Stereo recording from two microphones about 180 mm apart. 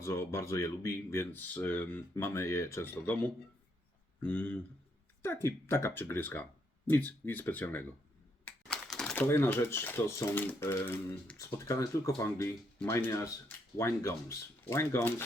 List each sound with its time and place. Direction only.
0.0 s speech: 15° left (ahead or behind)